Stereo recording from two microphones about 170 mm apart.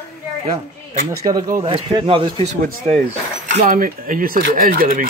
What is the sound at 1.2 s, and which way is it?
Speech, 25° right (ahead or behind).